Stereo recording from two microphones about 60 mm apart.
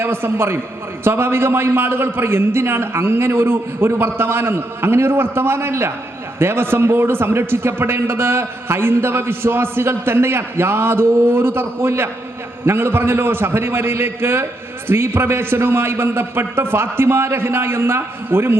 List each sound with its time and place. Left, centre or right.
0.0 s a man's voice: right